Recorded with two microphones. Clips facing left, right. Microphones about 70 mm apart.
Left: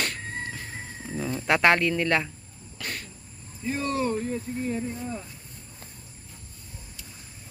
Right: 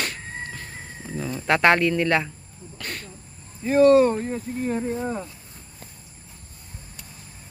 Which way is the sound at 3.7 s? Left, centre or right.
Right.